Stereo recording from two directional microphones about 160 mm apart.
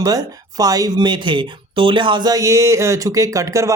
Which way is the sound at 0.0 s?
20° right (ahead or behind).